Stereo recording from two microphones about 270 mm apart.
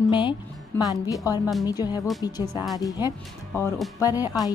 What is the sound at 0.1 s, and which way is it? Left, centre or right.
Speech, centre.